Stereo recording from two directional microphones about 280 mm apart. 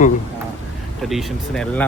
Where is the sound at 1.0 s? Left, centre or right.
Centre.